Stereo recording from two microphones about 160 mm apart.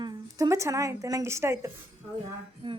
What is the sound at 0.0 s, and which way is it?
A woman's voice, 25° right (ahead or behind).